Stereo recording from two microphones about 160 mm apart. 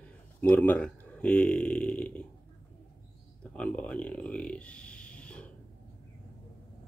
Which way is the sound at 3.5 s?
5° left (ahead or behind).